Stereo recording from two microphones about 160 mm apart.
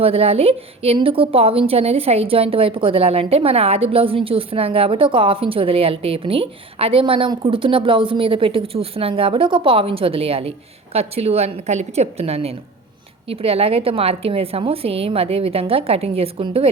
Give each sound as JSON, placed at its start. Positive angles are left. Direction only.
{"t": 0.0, "sound": "a woman's voice", "side_deg": -40}